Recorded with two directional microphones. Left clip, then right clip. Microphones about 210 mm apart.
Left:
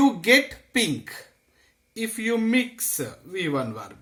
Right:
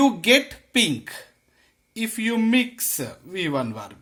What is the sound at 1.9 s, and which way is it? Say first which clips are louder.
Speech: even; 45° right (ahead or behind).